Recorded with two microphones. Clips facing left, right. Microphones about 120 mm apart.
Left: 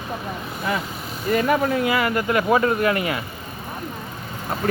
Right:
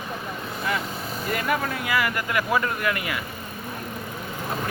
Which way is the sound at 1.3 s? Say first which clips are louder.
Left 8 dB; 30° left (ahead or behind).